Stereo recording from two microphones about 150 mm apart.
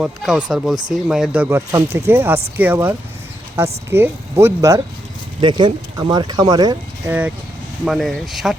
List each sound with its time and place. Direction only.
0.0 s speech: 5° right (ahead or behind); by 4.8 s 20° right (ahead or behind)
5.4 s speech: 30° right (ahead or behind)
7.1 s speech: 10° right (ahead or behind)